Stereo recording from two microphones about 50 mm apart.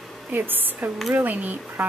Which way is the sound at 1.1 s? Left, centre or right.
Right.